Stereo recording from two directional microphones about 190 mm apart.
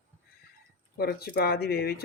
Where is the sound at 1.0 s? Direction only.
55° left (ahead or behind).